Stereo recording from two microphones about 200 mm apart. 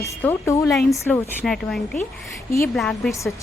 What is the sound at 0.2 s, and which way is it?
A woman's voice, 10° left (ahead or behind).